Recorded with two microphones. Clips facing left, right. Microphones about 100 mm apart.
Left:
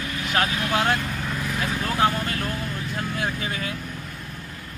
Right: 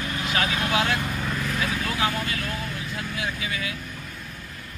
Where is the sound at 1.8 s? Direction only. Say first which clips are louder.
Left 4 dB; 45° left (ahead or behind).